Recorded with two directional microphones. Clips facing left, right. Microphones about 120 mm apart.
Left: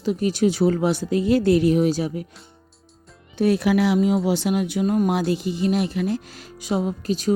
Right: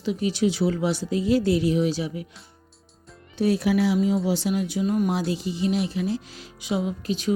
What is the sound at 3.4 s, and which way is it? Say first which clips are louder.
Speech: left 3 dB; 60° left (ahead or behind).